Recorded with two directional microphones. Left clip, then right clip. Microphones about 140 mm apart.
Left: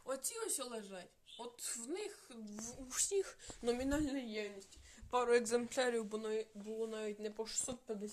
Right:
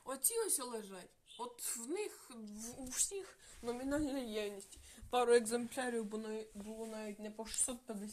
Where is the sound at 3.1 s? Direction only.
55° left (ahead or behind).